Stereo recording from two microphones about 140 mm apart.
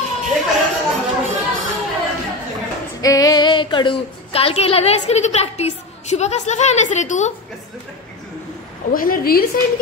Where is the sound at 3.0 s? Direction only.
25° left (ahead or behind); by 7.3 s 55° left (ahead or behind).